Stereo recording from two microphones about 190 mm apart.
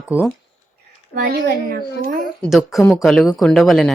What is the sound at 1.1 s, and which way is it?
A child's voice, 50° right (ahead or behind).